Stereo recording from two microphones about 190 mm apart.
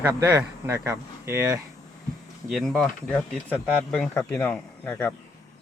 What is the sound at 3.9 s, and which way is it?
Speech, 5° left (ahead or behind).